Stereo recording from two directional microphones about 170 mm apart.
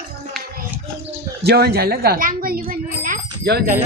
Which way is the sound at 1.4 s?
70° right (ahead or behind).